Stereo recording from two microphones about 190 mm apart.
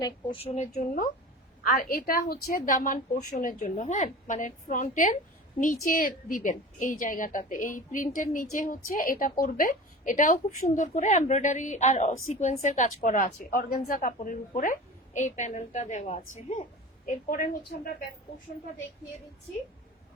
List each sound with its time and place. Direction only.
0.0 s a woman's voice: 25° left (ahead or behind); by 17.9 s 50° left (ahead or behind)